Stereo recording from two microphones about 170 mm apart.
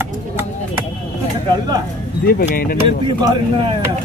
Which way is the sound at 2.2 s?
60° left (ahead or behind).